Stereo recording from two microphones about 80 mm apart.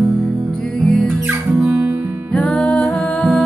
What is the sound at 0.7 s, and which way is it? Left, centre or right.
Music, centre.